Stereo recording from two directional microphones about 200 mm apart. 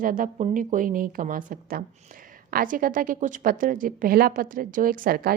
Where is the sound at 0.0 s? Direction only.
45° right (ahead or behind).